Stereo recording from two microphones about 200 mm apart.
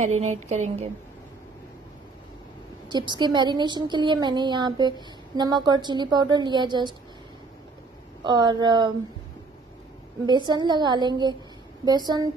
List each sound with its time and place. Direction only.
0.0 s speech: 35° right (ahead or behind)
2.9 s speech: 20° right (ahead or behind)
8.2 s speech: 20° right (ahead or behind)
10.2 s speech: 20° right (ahead or behind)